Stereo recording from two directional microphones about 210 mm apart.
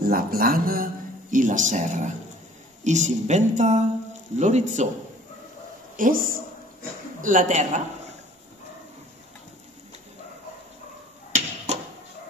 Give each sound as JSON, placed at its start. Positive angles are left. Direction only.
{"t": 0.0, "sound": "speech", "side_deg": -45}
{"t": 5.9, "sound": "speech", "side_deg": -40}
{"t": 11.3, "sound": "a sound", "side_deg": -30}